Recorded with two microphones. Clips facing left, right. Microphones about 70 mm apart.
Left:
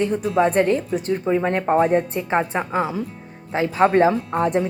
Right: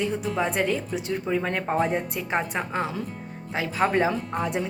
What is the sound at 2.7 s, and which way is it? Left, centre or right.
Speech, centre.